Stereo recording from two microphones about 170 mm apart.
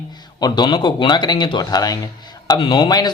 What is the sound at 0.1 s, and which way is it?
Speech, 25° left (ahead or behind).